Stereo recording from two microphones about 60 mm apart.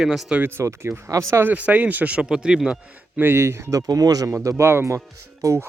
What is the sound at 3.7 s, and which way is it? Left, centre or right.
Speech, right.